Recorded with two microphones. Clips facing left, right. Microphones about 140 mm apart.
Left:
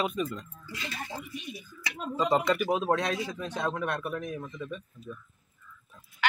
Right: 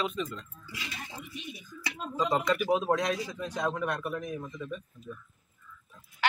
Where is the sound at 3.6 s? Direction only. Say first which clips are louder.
Even; centre (ahead or behind).